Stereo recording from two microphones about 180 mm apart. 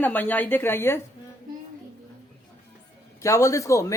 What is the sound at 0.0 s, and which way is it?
Speech, 10° left (ahead or behind).